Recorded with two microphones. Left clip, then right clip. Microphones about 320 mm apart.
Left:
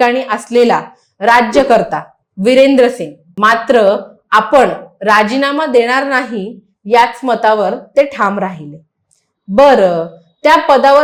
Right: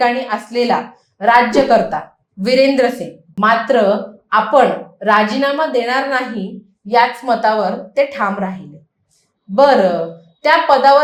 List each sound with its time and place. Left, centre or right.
0.0 s speech: left
6.8 s a woman's voice: left
9.6 s speech: left